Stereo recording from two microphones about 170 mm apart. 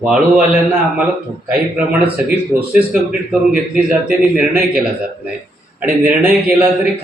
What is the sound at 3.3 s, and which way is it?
A man's voice, 5° right (ahead or behind).